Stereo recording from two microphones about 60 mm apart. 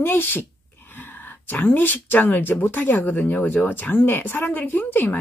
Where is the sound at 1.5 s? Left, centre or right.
Left.